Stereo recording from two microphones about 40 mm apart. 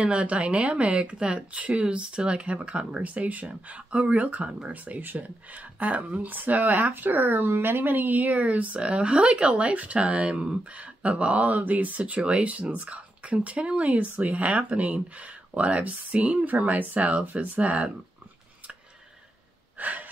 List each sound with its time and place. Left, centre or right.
0.0 s speech: right
3.0 s speech: right
8.8 s speech: right
19.8 s gasp: right